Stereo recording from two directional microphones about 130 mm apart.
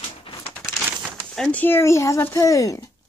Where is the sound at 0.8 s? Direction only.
10° right (ahead or behind).